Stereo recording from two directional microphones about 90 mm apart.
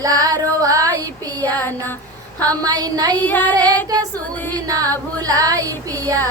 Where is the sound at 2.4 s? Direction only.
45° right (ahead or behind).